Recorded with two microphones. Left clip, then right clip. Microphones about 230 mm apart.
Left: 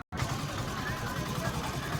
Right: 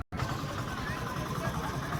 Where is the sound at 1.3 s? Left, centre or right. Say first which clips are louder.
Even; left.